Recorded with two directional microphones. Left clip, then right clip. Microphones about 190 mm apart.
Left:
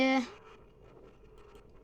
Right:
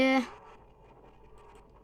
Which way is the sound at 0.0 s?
25° right (ahead or behind).